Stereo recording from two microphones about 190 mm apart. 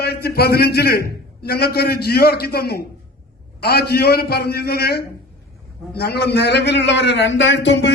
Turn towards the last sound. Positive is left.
turn(degrees=65)  # may be behind; listen again after turning